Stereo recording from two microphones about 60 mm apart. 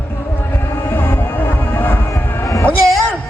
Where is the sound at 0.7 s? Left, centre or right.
Left.